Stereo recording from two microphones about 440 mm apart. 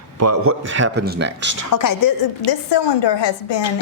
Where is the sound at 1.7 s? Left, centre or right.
Left.